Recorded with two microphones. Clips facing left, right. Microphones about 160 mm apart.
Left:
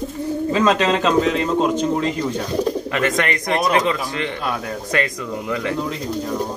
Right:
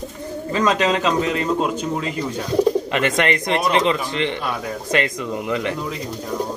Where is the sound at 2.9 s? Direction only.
25° right (ahead or behind).